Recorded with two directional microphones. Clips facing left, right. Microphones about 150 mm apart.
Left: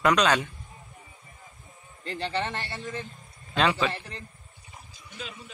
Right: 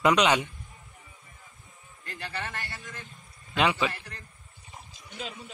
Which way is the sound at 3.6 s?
15° right (ahead or behind).